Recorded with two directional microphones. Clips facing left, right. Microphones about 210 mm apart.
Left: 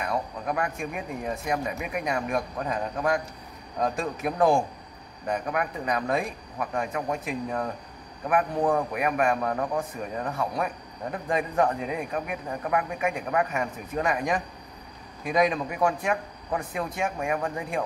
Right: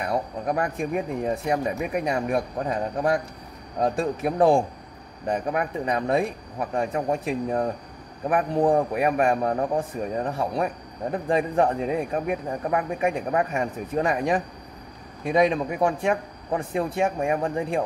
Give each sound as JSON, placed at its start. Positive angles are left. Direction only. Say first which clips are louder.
{"t": 0.0, "sound": "a man's voice", "louder": "right 3 dB", "side_deg": -35}